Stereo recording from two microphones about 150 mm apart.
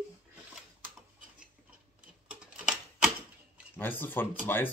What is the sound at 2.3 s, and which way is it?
Typewriter, 5° right (ahead or behind).